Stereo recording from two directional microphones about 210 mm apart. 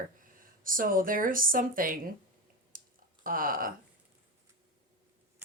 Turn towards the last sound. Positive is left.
turn(degrees=-40)  # may be behind; listen again after turning